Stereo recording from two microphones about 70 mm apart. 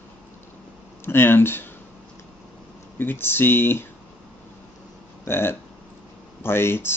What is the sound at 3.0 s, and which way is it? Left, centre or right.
Speech, left.